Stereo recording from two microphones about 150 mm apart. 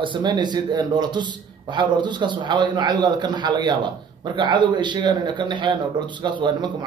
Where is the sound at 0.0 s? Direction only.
30° right (ahead or behind).